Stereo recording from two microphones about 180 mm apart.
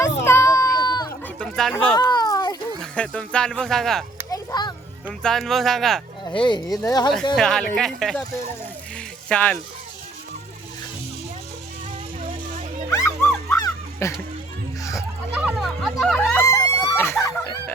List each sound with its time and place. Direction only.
0.0 s children playing: 15° left (ahead or behind)
1.2 s chatter: 5° left (ahead or behind)
1.7 s a child's voice: 5° left (ahead or behind)
2.0 s a sound: 25° left (ahead or behind)
2.8 s speech: 5° left (ahead or behind)
4.3 s a sound: 25° left (ahead or behind)
5.2 s speech: centre (ahead or behind)
6.2 s speech: 25° left (ahead or behind)
7.3 s speech: 5° left (ahead or behind)
9.3 s a child's voice: 10° left (ahead or behind)
12.9 s music: 15° left (ahead or behind)
15.5 s music: centre (ahead or behind)
16.4 s screaming: 15° left (ahead or behind)